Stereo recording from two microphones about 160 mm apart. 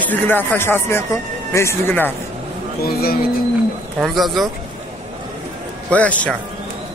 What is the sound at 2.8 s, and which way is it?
Speech, 70° left (ahead or behind).